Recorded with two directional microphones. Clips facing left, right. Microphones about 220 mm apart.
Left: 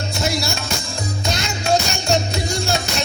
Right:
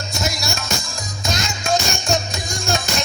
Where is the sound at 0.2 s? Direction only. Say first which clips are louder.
Left 4 dB; 30° left (ahead or behind).